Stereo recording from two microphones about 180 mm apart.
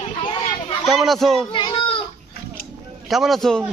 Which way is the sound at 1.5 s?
30° left (ahead or behind).